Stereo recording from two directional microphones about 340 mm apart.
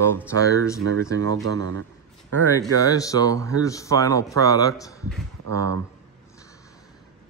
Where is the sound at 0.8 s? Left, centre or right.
Right.